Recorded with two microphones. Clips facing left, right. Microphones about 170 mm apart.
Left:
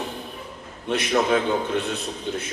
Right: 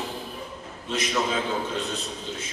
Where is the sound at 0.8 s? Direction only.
65° left (ahead or behind).